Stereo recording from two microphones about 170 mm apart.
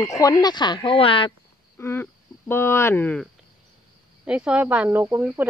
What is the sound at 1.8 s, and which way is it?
Speech, 15° left (ahead or behind).